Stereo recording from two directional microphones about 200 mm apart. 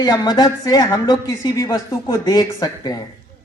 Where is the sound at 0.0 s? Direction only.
20° left (ahead or behind).